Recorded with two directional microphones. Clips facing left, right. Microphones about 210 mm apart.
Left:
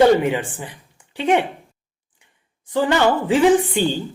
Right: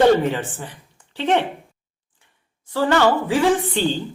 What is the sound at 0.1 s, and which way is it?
Speech, 10° left (ahead or behind).